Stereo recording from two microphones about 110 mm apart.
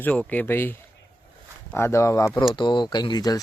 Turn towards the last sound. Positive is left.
turn(degrees=35)  # may be behind; listen again after turning